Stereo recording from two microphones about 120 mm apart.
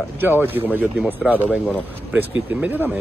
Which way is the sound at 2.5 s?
15° right (ahead or behind).